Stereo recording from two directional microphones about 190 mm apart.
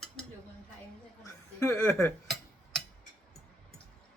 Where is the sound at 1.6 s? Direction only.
15° left (ahead or behind).